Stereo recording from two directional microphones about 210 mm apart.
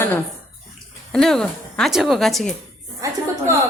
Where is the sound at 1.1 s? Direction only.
5° left (ahead or behind).